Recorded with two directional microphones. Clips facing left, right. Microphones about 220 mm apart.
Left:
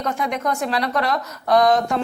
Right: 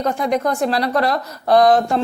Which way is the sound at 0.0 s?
35° right (ahead or behind).